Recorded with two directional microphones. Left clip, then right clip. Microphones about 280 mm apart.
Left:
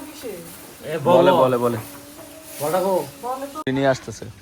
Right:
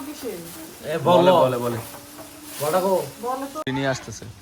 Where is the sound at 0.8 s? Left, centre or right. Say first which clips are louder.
Left 1 dB; centre.